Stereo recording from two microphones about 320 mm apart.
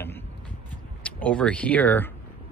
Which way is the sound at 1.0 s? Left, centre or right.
Centre.